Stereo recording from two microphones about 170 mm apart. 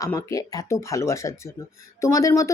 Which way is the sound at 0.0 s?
20° left (ahead or behind).